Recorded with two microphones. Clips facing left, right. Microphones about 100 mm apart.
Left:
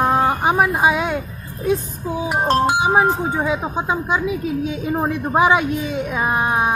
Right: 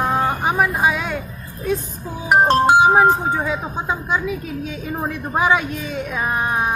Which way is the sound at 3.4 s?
15° left (ahead or behind).